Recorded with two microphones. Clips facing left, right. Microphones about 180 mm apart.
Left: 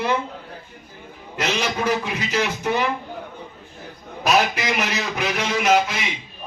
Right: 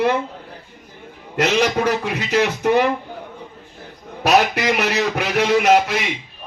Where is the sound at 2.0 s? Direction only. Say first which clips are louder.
Right 5 dB; 65° right (ahead or behind).